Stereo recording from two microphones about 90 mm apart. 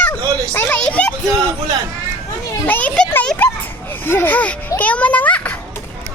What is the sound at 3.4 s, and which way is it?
Children playing, 20° left (ahead or behind).